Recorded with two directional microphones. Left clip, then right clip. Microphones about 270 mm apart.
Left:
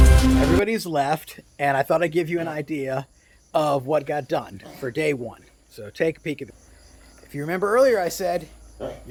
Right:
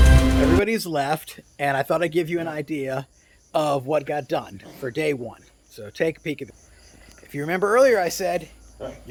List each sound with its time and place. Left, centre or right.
0.1 s speech: centre
8.8 s speech: left